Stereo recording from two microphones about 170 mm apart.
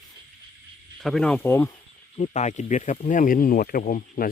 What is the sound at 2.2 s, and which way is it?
Speech, 45° left (ahead or behind).